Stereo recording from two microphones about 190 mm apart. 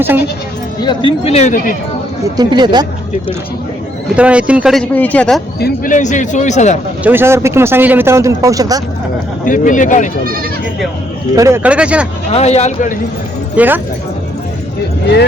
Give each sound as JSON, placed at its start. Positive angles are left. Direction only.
{"t": 0.8, "sound": "a man's voice", "side_deg": 25}
{"t": 2.3, "sound": "speech", "side_deg": -20}
{"t": 4.1, "sound": "speech", "side_deg": -5}
{"t": 5.5, "sound": "a man's voice", "side_deg": 50}
{"t": 7.0, "sound": "speech", "side_deg": -10}
{"t": 9.4, "sound": "speech", "side_deg": 45}
{"t": 11.3, "sound": "speech", "side_deg": -15}
{"t": 12.3, "sound": "a man's voice", "side_deg": 35}
{"t": 13.6, "sound": "speech", "side_deg": -10}